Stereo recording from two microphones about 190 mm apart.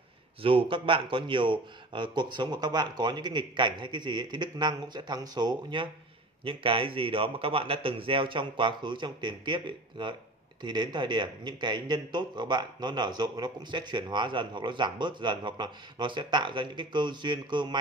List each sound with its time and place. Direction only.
0.4 s speech: 25° right (ahead or behind)